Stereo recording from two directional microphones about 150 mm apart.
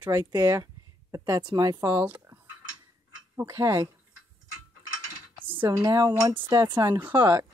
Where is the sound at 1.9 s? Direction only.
15° right (ahead or behind).